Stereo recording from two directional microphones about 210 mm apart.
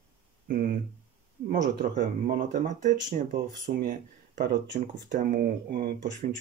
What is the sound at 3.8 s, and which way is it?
Speech, 40° right (ahead or behind).